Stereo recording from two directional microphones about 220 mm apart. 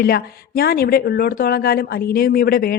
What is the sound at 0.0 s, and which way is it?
Speech, 45° left (ahead or behind).